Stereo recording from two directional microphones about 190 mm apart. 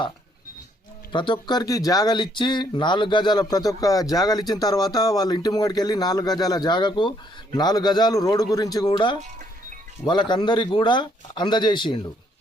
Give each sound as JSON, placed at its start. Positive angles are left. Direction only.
{"t": 1.1, "sound": "speech", "side_deg": 25}